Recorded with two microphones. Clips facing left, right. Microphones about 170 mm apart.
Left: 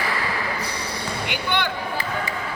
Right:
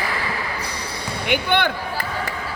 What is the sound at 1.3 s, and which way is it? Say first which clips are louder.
Basketball bounce: right 7 dB; 55° right (ahead or behind).